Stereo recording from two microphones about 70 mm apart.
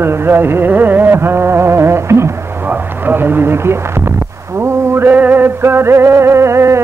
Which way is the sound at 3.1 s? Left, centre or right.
Right.